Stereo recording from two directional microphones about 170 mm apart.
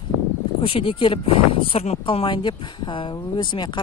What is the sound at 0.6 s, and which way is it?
A woman's voice, 30° left (ahead or behind).